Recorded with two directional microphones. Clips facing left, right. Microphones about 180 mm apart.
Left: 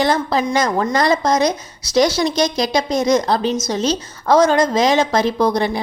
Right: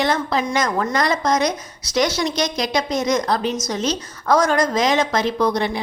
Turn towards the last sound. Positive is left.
turn(degrees=35)  # may be behind; listen again after turning